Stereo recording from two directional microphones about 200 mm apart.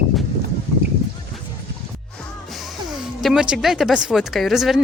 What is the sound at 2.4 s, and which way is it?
Speech, centre (ahead or behind).